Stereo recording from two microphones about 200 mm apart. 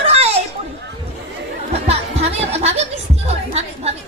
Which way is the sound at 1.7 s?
30° right (ahead or behind).